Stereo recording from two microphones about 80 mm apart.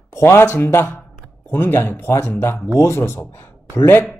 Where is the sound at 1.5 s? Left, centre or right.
Left.